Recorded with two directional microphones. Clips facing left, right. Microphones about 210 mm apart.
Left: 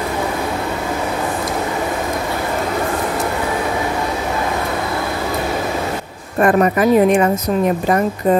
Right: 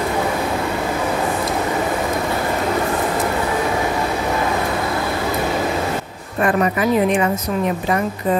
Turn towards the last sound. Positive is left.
turn(degrees=45)  # may be behind; listen again after turning